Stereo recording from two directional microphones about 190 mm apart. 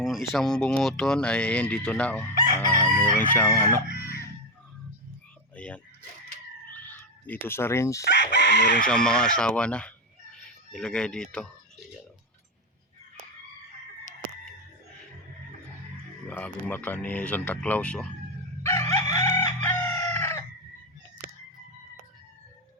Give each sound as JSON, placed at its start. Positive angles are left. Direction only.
{"t": 0.0, "sound": "speech", "side_deg": 0}
{"t": 2.3, "sound": "chicken", "side_deg": -45}
{"t": 3.0, "sound": "speech", "side_deg": 10}
{"t": 5.5, "sound": "a sound", "side_deg": 5}
{"t": 6.7, "sound": "dog", "side_deg": 10}
{"t": 8.0, "sound": "speech", "side_deg": 65}
{"t": 8.9, "sound": "speech", "side_deg": 5}
{"t": 16.6, "sound": "speech", "side_deg": 10}
{"t": 18.6, "sound": "chicken", "side_deg": 15}